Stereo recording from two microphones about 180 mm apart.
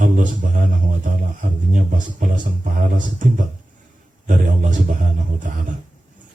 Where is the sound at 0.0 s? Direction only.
50° right (ahead or behind).